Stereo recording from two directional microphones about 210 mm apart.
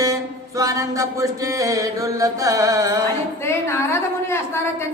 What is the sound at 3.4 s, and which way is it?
A woman's voice, 10° left (ahead or behind).